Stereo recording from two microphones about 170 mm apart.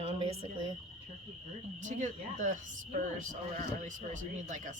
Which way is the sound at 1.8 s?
45° right (ahead or behind).